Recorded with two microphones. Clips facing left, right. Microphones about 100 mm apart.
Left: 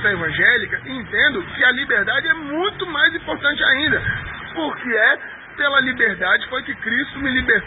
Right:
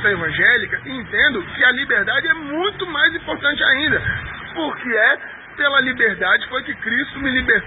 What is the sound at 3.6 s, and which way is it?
A man's voice, centre (ahead or behind).